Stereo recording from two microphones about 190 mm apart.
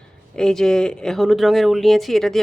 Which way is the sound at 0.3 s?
5° left (ahead or behind).